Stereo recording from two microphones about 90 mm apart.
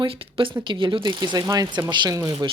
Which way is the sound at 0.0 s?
85° right.